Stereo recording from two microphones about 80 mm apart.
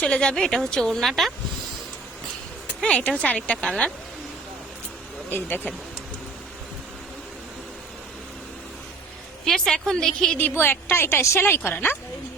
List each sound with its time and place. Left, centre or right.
0.0 s a woman's voice: centre
2.8 s a woman's voice: centre
5.3 s a woman's voice: left
9.4 s a woman's voice: centre
10.3 s a woman's voice: left